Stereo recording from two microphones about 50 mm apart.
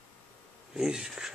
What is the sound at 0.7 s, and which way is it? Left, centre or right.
Insect, centre.